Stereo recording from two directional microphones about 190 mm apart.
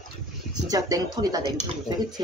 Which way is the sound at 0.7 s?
20° right (ahead or behind).